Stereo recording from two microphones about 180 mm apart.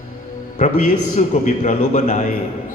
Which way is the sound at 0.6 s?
40° left (ahead or behind).